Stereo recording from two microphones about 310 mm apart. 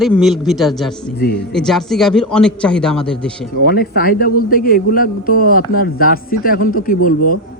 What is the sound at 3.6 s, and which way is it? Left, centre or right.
A man's voice, left.